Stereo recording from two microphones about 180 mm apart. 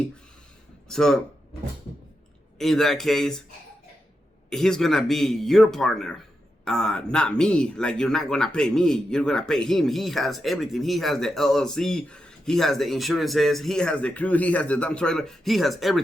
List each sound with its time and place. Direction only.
0.9 s speech: 5° left (ahead or behind)
2.6 s speech: centre (ahead or behind)
4.4 s speech: 5° left (ahead or behind)